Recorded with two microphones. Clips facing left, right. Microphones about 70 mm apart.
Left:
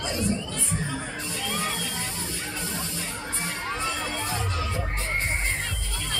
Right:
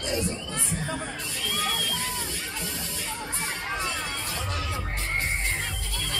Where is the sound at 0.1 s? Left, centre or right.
Right.